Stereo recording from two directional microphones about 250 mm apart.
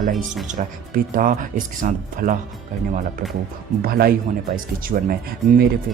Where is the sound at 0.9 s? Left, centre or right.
Right.